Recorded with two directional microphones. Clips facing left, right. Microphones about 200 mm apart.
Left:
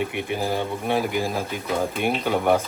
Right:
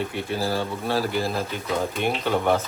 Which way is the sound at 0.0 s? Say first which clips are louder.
Left 1 dB; 15° left (ahead or behind).